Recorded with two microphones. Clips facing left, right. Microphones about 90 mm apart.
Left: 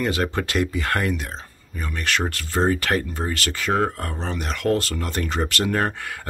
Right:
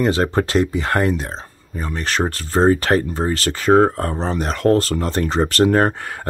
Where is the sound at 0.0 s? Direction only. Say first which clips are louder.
Right 6 dB; 30° right (ahead or behind).